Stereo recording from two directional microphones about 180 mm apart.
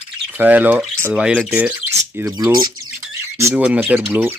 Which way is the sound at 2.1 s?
15° right (ahead or behind).